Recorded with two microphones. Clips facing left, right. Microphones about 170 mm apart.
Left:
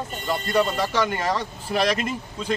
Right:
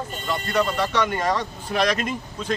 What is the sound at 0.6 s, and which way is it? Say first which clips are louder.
Speech: even; 5° left (ahead or behind).